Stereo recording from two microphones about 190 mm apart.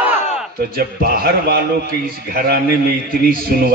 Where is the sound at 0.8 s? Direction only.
50° right (ahead or behind).